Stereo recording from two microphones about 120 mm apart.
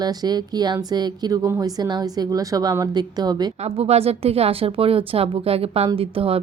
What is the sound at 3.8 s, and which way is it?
A woman's voice, 60° right (ahead or behind).